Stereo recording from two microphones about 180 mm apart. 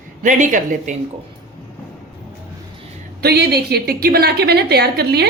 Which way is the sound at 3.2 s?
60° right (ahead or behind).